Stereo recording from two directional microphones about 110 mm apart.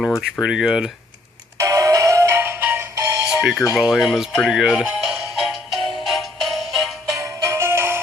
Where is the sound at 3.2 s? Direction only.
5° right (ahead or behind).